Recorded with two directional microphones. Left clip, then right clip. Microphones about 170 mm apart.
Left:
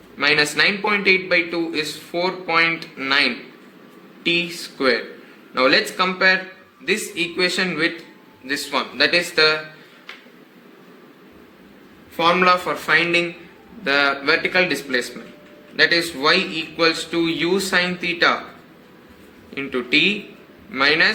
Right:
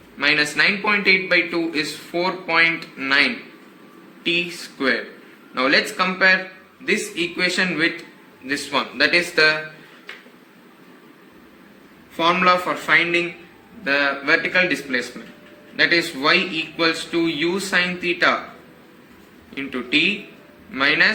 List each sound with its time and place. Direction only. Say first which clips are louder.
0.2 s a man's voice: left 1 dB; 20° left (ahead or behind)
12.1 s a man's voice: left 1 dB; 20° left (ahead or behind)
19.5 s a man's voice: left 2 dB; 20° left (ahead or behind)